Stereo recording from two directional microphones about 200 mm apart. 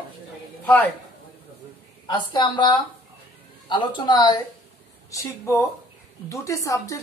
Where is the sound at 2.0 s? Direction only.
20° left (ahead or behind).